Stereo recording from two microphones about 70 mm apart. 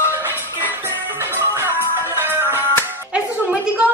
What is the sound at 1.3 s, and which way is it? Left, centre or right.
Music, right.